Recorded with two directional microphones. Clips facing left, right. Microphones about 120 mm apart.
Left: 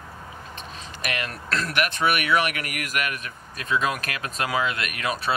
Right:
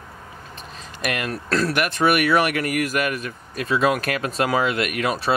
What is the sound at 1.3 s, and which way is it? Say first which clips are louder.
Speech: right 8 dB; 35° right (ahead or behind).